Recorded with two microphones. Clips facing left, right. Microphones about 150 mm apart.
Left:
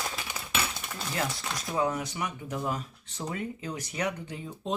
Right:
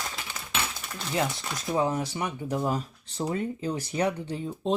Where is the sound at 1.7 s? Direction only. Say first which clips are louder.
Right 2 dB; 30° right (ahead or behind).